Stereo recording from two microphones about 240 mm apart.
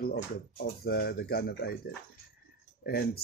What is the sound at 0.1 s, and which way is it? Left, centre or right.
Speech, left.